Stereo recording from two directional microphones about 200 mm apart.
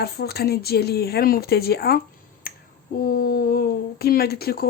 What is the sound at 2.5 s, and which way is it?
Finger snapping, 45° left (ahead or behind).